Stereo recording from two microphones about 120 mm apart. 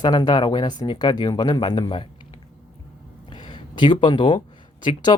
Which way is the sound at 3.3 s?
40° left (ahead or behind).